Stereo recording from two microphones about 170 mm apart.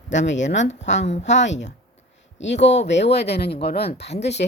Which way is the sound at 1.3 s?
90° left.